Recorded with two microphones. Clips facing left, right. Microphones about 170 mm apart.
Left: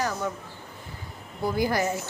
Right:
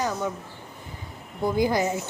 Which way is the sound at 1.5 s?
20° right (ahead or behind).